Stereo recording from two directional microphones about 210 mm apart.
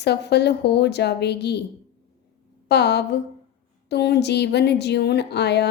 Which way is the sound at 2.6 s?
55° left (ahead or behind).